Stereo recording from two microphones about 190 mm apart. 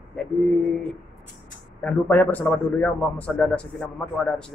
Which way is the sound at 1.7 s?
10° left (ahead or behind).